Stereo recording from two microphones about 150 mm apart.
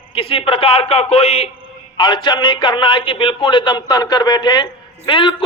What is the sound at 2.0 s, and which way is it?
A man's voice, 30° left (ahead or behind).